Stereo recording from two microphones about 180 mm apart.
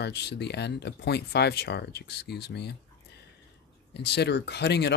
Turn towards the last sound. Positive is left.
turn(degrees=70)  # may be behind; listen again after turning